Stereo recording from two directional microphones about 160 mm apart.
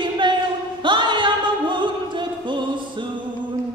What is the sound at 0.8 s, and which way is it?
Music, 30° right (ahead or behind).